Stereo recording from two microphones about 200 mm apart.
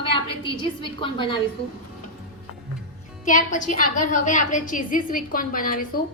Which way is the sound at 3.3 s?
40° left (ahead or behind).